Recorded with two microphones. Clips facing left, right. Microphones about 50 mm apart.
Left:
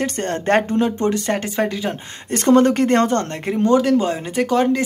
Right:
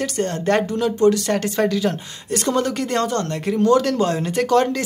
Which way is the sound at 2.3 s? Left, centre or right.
Left.